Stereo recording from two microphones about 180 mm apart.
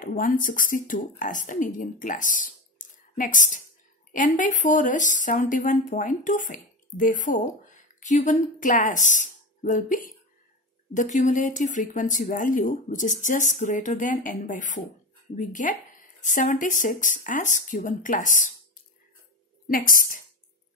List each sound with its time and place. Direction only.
0.0 s speech: 50° left (ahead or behind)
19.7 s speech: 50° left (ahead or behind)